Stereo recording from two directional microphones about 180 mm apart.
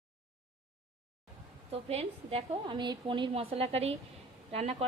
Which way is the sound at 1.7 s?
35° right (ahead or behind).